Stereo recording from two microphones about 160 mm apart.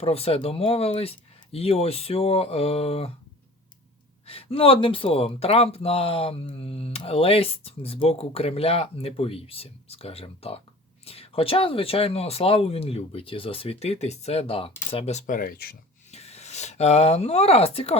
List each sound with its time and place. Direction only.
0.0 s speech: 40° left (ahead or behind)
4.3 s speech: 35° left (ahead or behind)
15.4 s speech: 65° left (ahead or behind)
16.1 s speech: 40° left (ahead or behind)